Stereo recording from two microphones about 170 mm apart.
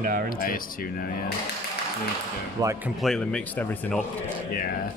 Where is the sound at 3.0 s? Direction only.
5° left (ahead or behind).